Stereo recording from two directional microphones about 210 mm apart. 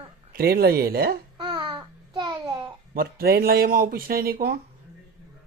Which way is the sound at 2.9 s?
45° right (ahead or behind).